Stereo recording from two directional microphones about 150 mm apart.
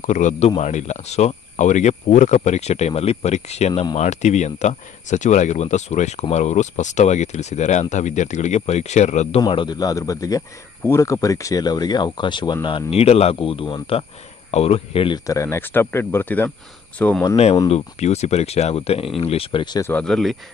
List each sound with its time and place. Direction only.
0.0 s speech: 55° left (ahead or behind)
9.4 s speech: 30° left (ahead or behind)
15.1 s speech: 20° left (ahead or behind)
17.6 s speech: 45° left (ahead or behind)
19.8 s speech: 10° left (ahead or behind)